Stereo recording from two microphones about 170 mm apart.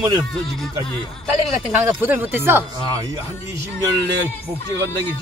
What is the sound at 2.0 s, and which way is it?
A man's voice, 10° right (ahead or behind).